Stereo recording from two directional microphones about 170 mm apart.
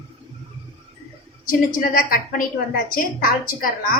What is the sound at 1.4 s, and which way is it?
A woman's voice, 55° left (ahead or behind).